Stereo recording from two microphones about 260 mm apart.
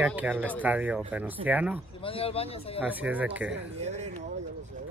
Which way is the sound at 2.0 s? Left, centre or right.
Left.